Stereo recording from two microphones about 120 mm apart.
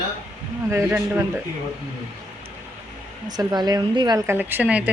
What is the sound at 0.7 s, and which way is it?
Speech, 20° right (ahead or behind).